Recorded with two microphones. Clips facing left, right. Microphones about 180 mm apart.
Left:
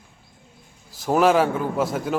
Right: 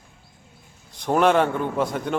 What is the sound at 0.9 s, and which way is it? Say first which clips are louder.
A man's voice: left 1 dB; 5° left (ahead or behind).